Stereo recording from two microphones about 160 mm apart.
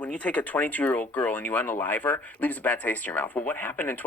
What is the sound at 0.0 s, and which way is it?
Speech, 10° left (ahead or behind).